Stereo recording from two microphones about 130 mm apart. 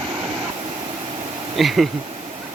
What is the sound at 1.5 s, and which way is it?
Speech, centre (ahead or behind).